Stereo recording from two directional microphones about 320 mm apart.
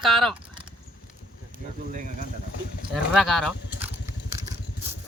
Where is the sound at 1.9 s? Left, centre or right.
Right.